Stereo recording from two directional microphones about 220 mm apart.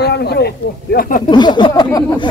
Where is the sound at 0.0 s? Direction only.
50° left (ahead or behind).